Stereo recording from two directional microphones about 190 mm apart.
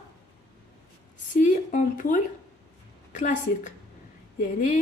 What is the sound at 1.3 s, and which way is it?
A woman's voice, 40° left (ahead or behind).